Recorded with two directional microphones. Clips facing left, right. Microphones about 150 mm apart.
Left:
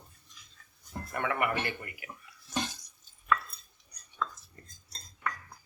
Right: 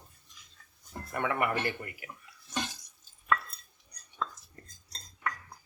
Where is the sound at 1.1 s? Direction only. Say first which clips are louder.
Right 1 dB; 30° right (ahead or behind).